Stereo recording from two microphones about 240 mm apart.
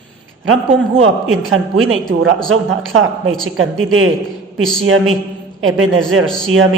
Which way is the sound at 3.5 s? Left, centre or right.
Right.